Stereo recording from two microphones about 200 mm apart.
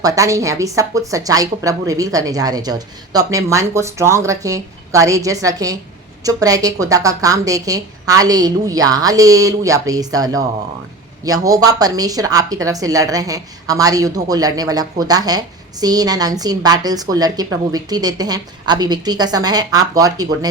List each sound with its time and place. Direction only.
0.0 s a woman's voice: 15° right (ahead or behind)